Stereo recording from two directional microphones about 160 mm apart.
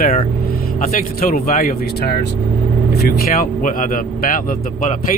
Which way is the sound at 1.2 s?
65° left (ahead or behind).